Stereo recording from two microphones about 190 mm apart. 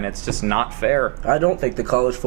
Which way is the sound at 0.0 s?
15° right (ahead or behind).